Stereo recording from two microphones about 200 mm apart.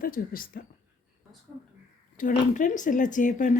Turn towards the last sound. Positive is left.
turn(degrees=40)  # may be behind; listen again after turning